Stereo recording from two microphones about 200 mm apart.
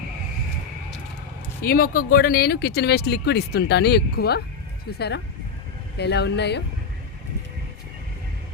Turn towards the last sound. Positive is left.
turn(degrees=55)  # may be behind; listen again after turning